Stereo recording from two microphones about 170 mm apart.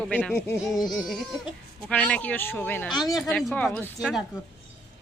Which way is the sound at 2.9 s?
25° left (ahead or behind).